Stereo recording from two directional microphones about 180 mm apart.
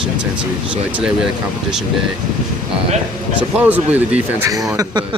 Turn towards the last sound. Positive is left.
turn(degrees=-20)  # may be behind; listen again after turning